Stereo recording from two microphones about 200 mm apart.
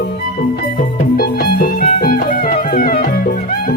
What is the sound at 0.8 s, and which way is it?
Music, 50° left (ahead or behind).